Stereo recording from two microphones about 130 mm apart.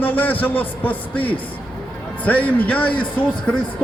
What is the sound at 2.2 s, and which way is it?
A man's voice, 10° left (ahead or behind).